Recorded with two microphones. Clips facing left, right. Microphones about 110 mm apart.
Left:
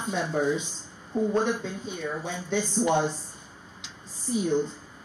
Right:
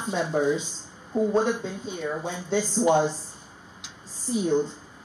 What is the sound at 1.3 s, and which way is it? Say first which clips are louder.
Speech: right 2 dB; 30° right (ahead or behind).